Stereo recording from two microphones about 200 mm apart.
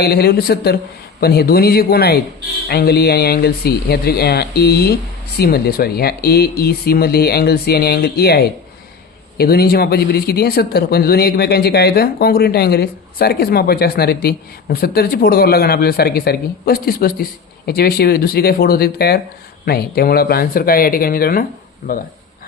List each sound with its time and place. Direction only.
0.0 s speech: 50° left (ahead or behind)